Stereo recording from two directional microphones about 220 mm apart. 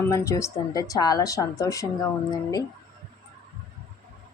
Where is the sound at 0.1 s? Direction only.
15° left (ahead or behind).